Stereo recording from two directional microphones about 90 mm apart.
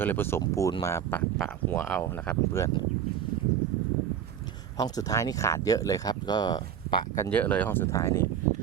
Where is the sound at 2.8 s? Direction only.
60° left (ahead or behind).